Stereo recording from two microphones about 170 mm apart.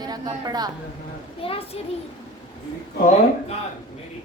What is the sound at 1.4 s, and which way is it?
Speech, 35° left (ahead or behind).